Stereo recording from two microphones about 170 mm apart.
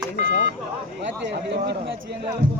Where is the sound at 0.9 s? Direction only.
90° right.